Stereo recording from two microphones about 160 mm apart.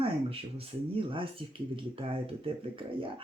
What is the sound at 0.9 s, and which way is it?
Speech, 35° right (ahead or behind).